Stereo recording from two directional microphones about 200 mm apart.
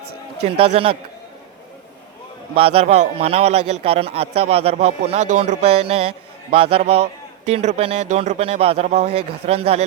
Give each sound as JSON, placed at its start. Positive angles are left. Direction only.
{"t": 0.4, "sound": "a man's voice", "side_deg": -30}
{"t": 2.6, "sound": "a man's voice", "side_deg": -30}